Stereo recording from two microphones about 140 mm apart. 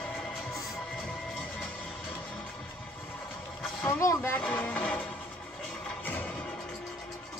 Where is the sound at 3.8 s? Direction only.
20° left (ahead or behind).